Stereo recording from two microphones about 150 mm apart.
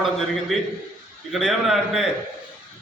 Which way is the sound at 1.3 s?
Centre (ahead or behind).